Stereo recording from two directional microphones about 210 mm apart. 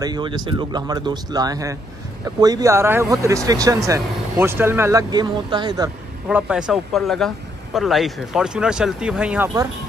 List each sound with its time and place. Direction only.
0.0 s speech: 20° right (ahead or behind)
6.2 s speech: 5° right (ahead or behind)